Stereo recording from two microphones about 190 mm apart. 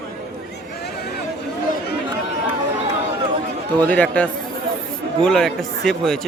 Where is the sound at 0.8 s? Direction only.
60° left (ahead or behind).